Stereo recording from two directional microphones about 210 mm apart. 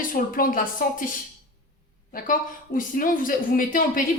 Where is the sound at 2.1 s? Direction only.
40° left (ahead or behind).